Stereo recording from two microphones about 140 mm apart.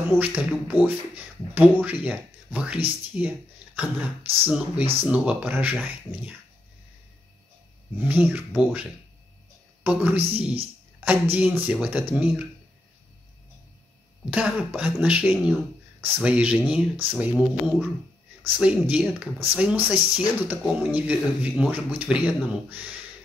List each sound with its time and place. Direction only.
0.0 s speech: 10° right (ahead or behind)
6.1 s dog: 20° right (ahead or behind)
8.0 s speech: 10° right (ahead or behind)
9.8 s speech: 10° right (ahead or behind)
14.3 s speech: 10° right (ahead or behind)